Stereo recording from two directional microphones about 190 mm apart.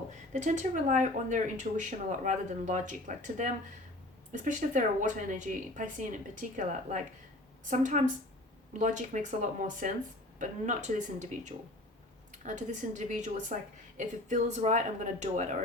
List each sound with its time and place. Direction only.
0.3 s a woman's voice: 40° right (ahead or behind)